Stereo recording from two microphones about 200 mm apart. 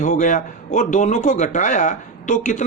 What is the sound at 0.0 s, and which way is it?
Speech, 40° left (ahead or behind).